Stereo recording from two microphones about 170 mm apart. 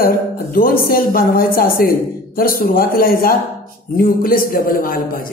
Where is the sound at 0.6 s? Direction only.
60° left (ahead or behind).